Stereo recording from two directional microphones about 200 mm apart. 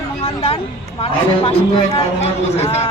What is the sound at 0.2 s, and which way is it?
A man's voice, 30° left (ahead or behind).